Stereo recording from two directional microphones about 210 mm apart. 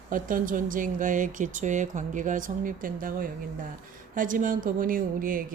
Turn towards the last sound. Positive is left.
turn(degrees=-40)  # may be behind; listen again after turning